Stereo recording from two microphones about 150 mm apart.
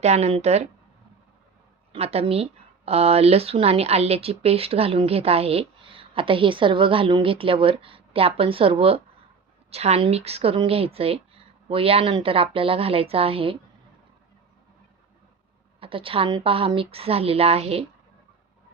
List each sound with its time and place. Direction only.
0.0 s speech: 45° right (ahead or behind)
1.9 s speech: 40° right (ahead or behind)
15.8 s speech: 35° right (ahead or behind)